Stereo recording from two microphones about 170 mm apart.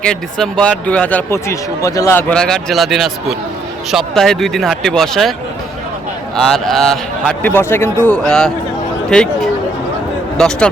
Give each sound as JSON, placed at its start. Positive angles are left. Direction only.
{"t": 0.0, "sound": "speech", "side_deg": 5}
{"t": 2.3, "sound": "a man's voice", "side_deg": 5}
{"t": 6.3, "sound": "a man's voice", "side_deg": 0}